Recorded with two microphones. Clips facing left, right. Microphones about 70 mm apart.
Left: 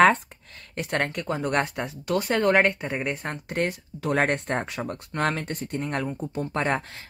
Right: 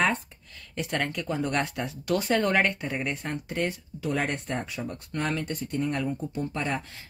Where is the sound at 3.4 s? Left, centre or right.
Left.